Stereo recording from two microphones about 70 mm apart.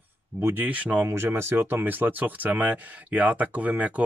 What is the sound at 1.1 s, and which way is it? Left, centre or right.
Speech, right.